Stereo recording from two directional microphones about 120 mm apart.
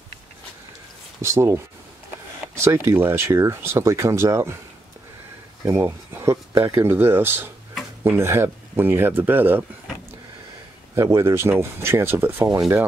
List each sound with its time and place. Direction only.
1.2 s speech: 20° right (ahead or behind)
5.7 s speech: 20° right (ahead or behind)
11.0 s speech: 20° right (ahead or behind)